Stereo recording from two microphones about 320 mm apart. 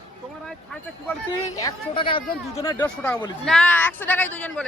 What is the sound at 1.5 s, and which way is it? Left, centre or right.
A woman's voice, centre.